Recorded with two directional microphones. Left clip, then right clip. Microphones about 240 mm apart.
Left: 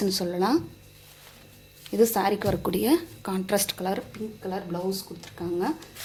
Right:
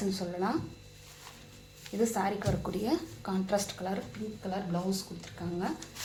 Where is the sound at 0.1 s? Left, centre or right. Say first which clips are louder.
Left 8 dB; left.